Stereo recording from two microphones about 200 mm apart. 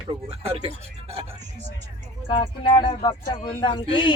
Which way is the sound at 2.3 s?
25° left (ahead or behind).